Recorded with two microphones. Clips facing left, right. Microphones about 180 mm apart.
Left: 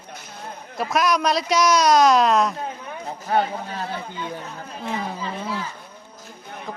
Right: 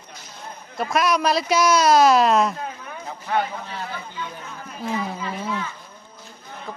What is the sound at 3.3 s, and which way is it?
Speech, 40° left (ahead or behind).